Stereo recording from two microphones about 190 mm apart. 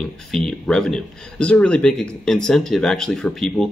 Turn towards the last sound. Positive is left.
turn(degrees=0)  # may be behind; listen again after turning